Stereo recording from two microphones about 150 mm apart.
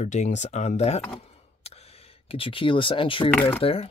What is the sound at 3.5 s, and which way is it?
Speech, 40° left (ahead or behind).